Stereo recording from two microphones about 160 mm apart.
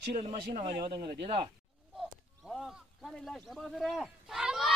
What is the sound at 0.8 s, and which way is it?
Speech, 30° right (ahead or behind).